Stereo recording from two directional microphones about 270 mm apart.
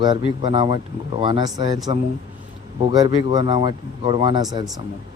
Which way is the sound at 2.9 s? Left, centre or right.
Centre.